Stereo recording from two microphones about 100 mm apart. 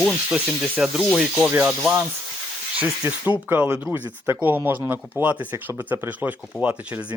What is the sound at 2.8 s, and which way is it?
Speech, 15° right (ahead or behind).